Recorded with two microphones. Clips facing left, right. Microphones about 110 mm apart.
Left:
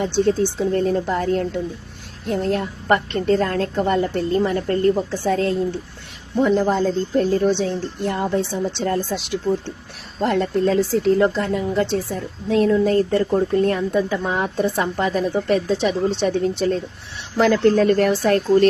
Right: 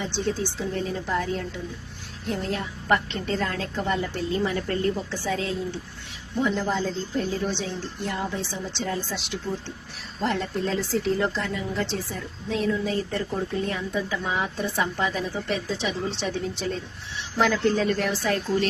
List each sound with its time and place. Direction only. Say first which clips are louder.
0.0 s a woman's voice: left 9 dB; 55° left (ahead or behind)